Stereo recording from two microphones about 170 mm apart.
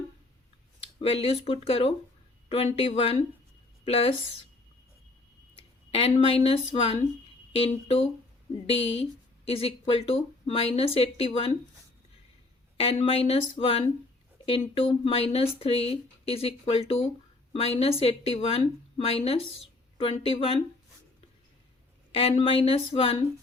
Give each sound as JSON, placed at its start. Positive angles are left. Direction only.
{"t": 1.0, "sound": "speech", "side_deg": 35}
{"t": 5.9, "sound": "speech", "side_deg": 35}
{"t": 12.7, "sound": "speech", "side_deg": 35}
{"t": 22.1, "sound": "speech", "side_deg": 35}